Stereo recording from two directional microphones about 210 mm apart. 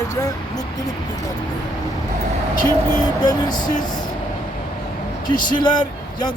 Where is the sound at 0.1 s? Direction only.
15° left (ahead or behind).